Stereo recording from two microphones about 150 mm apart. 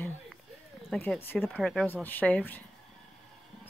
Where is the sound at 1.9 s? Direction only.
10° left (ahead or behind).